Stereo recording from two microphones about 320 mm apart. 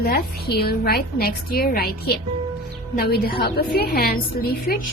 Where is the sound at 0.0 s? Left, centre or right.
Left.